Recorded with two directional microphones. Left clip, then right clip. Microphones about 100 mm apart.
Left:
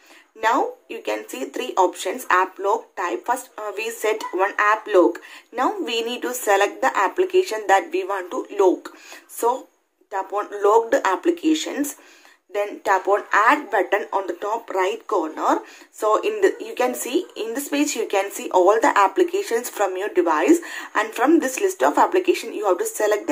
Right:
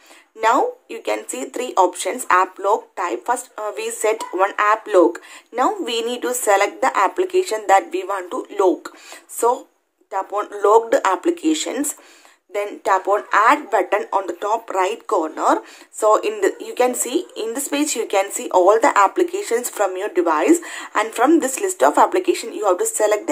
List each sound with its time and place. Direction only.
0.4 s speech: 35° right (ahead or behind)
10.1 s speech: 35° right (ahead or behind)